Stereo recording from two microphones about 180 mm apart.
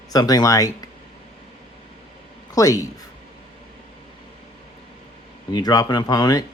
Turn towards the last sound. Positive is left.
turn(degrees=20)  # may be behind; listen again after turning